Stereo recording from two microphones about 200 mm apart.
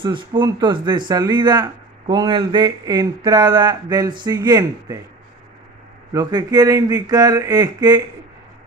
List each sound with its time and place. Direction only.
0.0 s speech: 25° right (ahead or behind)
6.1 s speech: 20° right (ahead or behind)